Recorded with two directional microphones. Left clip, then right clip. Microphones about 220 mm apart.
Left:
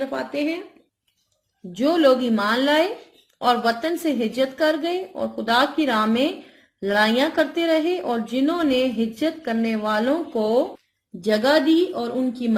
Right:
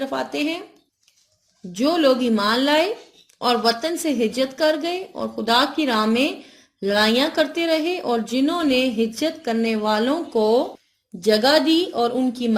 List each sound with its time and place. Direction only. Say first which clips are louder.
0.0 s a woman's voice: right 1 dB; 35° right (ahead or behind)
1.9 s a woman's voice: left 1 dB; 40° right (ahead or behind)
11.2 s a woman's voice: right 2 dB; 25° right (ahead or behind)